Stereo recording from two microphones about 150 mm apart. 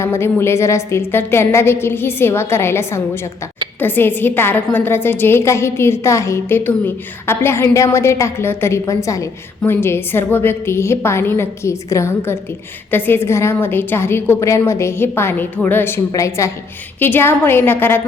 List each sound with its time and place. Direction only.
0.0 s a woman's voice: 15° left (ahead or behind)